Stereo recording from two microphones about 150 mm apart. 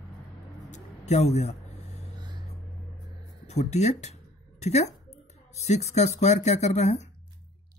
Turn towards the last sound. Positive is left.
turn(degrees=50)  # may be behind; listen again after turning